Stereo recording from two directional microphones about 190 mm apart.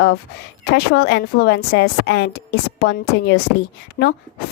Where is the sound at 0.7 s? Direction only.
60° left (ahead or behind).